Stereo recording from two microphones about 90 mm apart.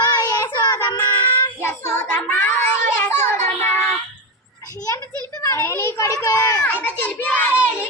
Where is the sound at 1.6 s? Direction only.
25° left (ahead or behind).